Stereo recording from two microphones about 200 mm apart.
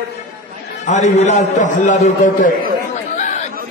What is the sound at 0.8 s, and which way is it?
A man's voice, 35° left (ahead or behind).